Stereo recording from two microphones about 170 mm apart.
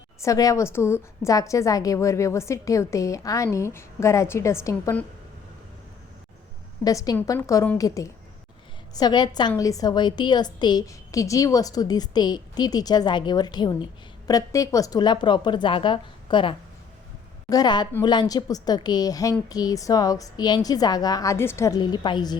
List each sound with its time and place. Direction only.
0.2 s a woman's voice: 20° left (ahead or behind)
6.8 s a woman's voice: 20° left (ahead or behind)